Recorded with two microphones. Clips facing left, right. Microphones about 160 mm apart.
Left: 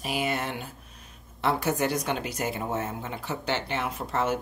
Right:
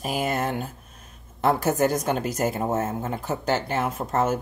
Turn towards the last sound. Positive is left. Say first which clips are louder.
# right 4 dB
turn(degrees=-45)  # may be behind; listen again after turning